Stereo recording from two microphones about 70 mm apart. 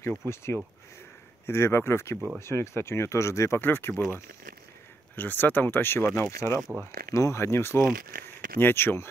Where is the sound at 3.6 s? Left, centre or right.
Left.